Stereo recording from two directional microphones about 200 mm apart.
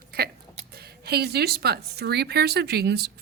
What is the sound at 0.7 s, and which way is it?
Speech, 50° right (ahead or behind).